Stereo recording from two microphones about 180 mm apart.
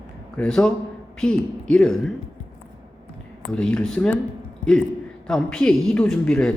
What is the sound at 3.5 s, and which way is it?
Speech, 5° left (ahead or behind).